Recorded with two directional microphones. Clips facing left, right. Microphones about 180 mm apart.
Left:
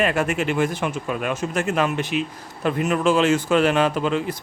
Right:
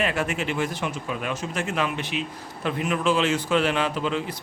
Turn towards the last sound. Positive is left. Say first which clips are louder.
# left 5 dB
turn(degrees=50)  # may be behind; listen again after turning